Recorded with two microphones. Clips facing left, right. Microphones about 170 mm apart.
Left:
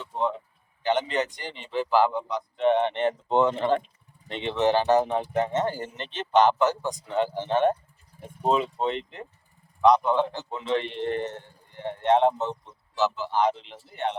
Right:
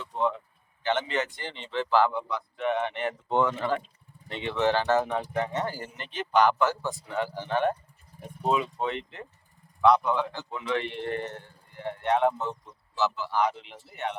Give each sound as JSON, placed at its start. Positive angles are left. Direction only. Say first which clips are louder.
{"t": 0.0, "sound": "speech", "louder": "even", "side_deg": 20}